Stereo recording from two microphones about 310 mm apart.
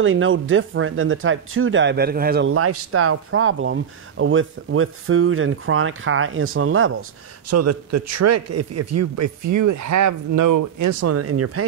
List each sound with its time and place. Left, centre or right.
0.0 s speech: right
2.5 s speech: right